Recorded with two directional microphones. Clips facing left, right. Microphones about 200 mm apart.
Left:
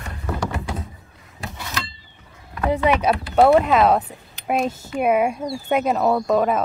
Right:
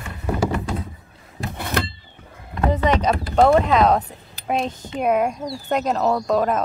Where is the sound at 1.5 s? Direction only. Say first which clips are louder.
Right 8 dB; 55° right (ahead or behind).